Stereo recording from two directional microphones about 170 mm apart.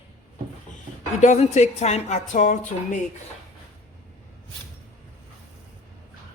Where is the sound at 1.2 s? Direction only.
40° left (ahead or behind).